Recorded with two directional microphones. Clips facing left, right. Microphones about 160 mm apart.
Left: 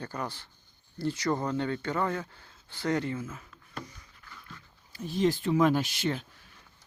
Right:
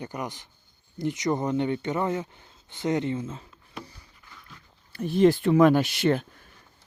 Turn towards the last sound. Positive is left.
turn(degrees=-55)  # may be behind; listen again after turning